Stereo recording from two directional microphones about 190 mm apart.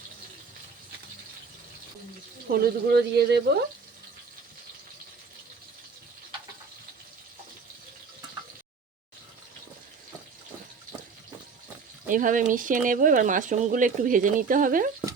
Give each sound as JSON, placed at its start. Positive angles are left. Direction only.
{"t": 2.5, "sound": "speech", "side_deg": -55}
{"t": 12.0, "sound": "speech", "side_deg": -45}